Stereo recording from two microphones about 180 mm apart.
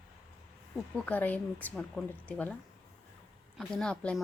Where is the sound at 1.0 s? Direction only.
10° left (ahead or behind).